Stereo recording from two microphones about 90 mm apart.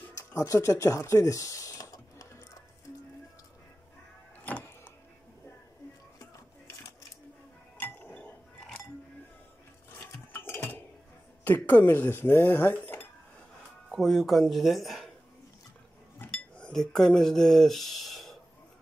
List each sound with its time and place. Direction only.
0.1 s a sound: 35° left (ahead or behind)
9.9 s dishes: 25° left (ahead or behind)
13.8 s speech: centre (ahead or behind)
16.3 s speech: 10° left (ahead or behind)